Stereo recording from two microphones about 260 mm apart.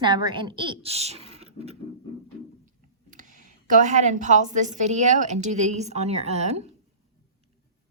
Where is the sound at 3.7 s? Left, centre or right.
Right.